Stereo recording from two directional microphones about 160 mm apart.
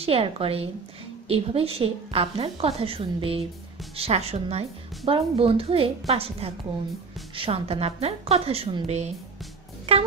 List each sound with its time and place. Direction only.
0.0 s a woman's voice: 35° right (ahead or behind)